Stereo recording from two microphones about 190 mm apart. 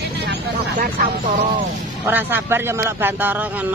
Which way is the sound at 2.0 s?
10° right (ahead or behind).